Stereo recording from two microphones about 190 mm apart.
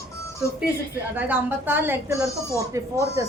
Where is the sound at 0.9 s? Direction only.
10° right (ahead or behind).